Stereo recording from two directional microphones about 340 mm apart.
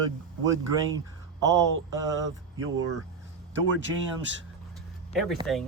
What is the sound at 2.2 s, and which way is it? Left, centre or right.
Speech, right.